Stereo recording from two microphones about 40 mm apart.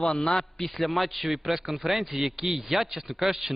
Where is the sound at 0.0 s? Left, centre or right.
Centre.